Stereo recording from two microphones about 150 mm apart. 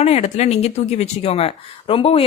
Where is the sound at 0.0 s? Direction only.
50° left (ahead or behind).